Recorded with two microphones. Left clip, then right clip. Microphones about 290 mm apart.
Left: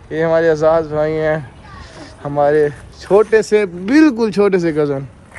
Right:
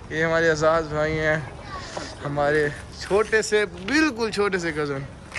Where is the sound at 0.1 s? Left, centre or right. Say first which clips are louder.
Left 7 dB; centre.